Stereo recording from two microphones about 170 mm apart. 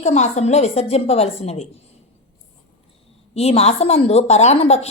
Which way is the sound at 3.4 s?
35° left (ahead or behind).